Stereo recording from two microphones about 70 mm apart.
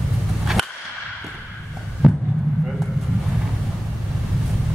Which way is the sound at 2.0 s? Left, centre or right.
Centre.